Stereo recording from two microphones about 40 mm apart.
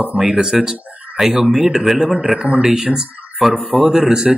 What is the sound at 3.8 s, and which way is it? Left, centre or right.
Speech, centre.